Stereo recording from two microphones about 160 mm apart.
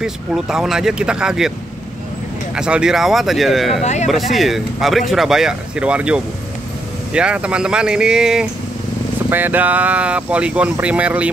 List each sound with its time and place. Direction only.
0.0 s speech: 5° right (ahead or behind)
2.5 s speech: 5° right (ahead or behind)
3.8 s speech: 45° left (ahead or behind)
4.1 s speech: centre (ahead or behind)